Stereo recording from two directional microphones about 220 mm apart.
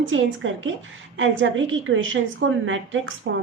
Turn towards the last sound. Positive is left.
turn(degrees=-60)  # may be behind; listen again after turning